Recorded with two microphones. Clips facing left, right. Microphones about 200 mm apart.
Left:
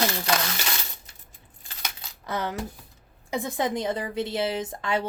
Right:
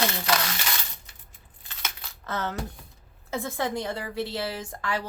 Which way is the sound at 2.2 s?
15° left (ahead or behind).